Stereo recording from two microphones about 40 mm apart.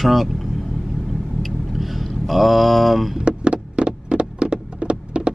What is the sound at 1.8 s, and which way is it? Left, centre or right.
Speech, centre.